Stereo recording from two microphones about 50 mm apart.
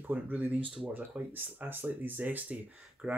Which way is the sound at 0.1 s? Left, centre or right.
Right.